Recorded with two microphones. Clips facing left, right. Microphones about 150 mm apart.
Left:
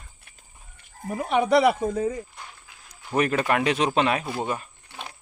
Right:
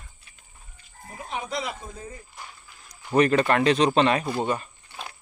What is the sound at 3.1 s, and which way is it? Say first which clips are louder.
Speech: right 3 dB; 5° left (ahead or behind).